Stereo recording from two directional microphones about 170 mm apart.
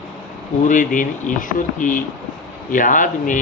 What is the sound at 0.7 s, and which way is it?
Speech, 50° left (ahead or behind).